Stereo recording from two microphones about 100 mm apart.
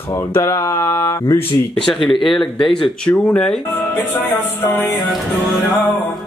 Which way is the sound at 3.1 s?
10° left (ahead or behind).